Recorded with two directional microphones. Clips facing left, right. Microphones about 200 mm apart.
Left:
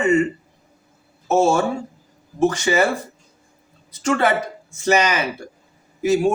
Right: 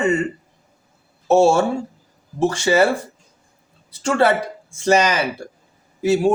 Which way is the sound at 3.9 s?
30° right (ahead or behind).